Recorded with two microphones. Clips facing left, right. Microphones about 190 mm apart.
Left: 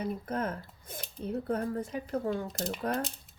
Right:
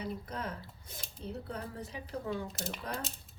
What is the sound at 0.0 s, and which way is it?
Speech, 50° left (ahead or behind).